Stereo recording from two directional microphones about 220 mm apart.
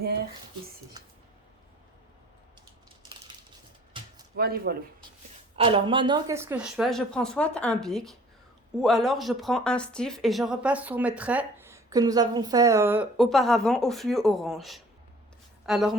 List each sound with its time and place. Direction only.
4.4 s speech: 45° right (ahead or behind)
5.5 s speech: 25° right (ahead or behind); by 16.0 s centre (ahead or behind)